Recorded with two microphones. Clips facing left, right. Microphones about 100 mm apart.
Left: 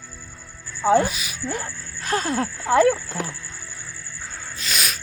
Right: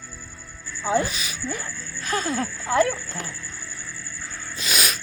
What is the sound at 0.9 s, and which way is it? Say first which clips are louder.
Speech: left 5 dB; 50° left (ahead or behind).